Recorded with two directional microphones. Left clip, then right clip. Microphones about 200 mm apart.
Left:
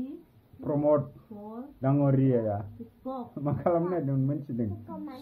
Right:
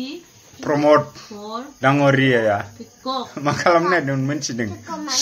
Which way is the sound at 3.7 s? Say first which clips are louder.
Right 12 dB; 10° right (ahead or behind).